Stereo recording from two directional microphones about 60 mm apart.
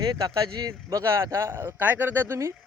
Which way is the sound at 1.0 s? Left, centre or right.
Right.